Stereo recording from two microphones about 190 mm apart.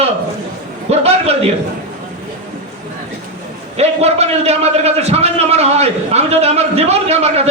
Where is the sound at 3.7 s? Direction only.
35° right (ahead or behind).